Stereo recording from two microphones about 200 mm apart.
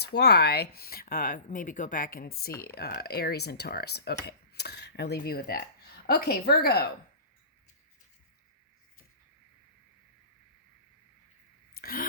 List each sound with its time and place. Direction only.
0.0 s speech: 55° left (ahead or behind)
11.7 s throat clearing: 45° left (ahead or behind)